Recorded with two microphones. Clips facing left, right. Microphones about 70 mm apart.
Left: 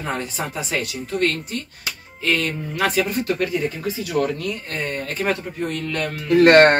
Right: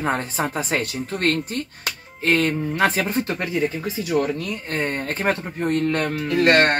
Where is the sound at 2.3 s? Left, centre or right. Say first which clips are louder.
Right 3 dB; right.